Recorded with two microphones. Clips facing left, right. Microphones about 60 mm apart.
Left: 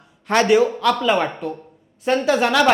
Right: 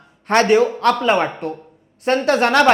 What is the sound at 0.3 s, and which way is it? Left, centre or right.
Speech, right.